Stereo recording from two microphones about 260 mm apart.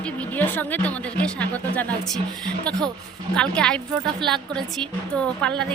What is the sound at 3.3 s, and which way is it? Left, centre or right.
A woman's voice, centre.